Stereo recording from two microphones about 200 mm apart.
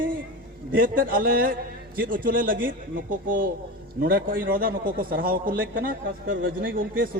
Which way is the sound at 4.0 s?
45° right (ahead or behind).